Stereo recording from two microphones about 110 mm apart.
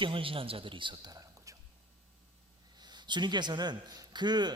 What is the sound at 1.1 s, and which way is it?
Whispering, 30° right (ahead or behind).